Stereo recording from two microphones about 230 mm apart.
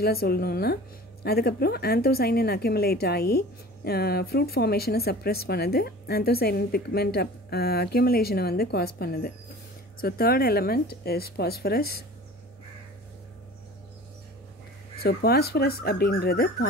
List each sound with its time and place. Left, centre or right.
0.0 s a woman's voice: left
15.0 s a woman's voice: left